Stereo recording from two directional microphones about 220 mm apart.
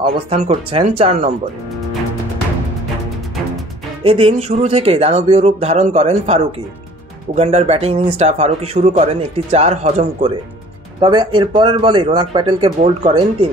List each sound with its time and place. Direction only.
0.0 s speech: 25° right (ahead or behind)
4.0 s speech: 25° right (ahead or behind)